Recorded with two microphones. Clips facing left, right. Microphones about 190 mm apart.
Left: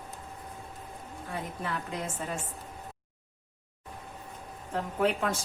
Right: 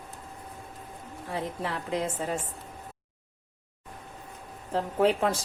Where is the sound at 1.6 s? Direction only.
30° right (ahead or behind).